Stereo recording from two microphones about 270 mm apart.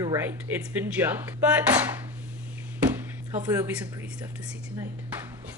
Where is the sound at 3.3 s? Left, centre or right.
Centre.